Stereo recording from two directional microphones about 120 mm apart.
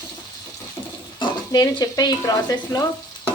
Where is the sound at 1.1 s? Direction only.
35° left (ahead or behind).